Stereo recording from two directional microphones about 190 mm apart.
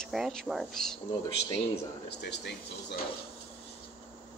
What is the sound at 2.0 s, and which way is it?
Speech, 65° left (ahead or behind).